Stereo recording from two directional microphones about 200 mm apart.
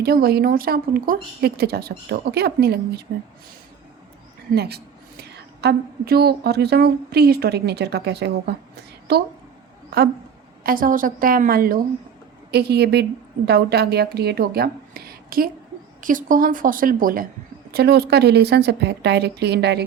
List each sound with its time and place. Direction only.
0.0 s speech: 50° right (ahead or behind)
4.5 s a woman's voice: 55° right (ahead or behind)
10.6 s speech: 45° right (ahead or behind)